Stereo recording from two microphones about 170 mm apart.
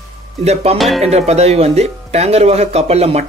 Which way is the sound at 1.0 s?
40° right (ahead or behind).